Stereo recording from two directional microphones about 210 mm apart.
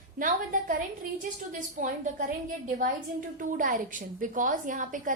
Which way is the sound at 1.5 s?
40° right (ahead or behind).